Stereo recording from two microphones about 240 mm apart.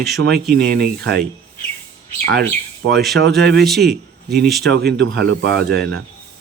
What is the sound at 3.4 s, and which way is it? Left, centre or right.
A man's voice, right.